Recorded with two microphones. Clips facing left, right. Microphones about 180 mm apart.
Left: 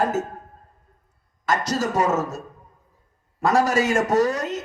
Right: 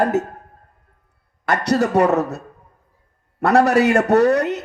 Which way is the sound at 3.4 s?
65° right (ahead or behind).